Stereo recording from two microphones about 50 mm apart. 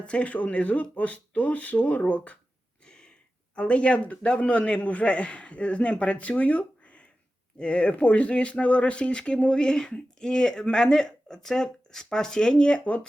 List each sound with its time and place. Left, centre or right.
0.0 s speech: left
2.8 s a sound: centre
3.5 s a man's voice: left